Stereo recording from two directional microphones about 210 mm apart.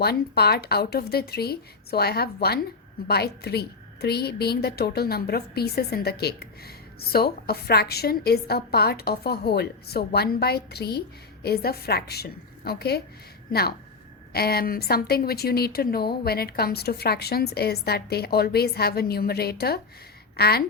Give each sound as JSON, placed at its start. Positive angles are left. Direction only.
{"t": 0.0, "sound": "a woman's voice", "side_deg": 50}